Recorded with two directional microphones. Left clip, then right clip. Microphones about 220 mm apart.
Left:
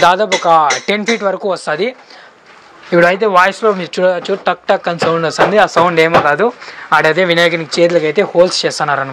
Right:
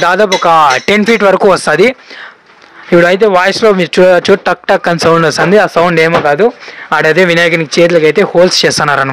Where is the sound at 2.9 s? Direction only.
35° right (ahead or behind).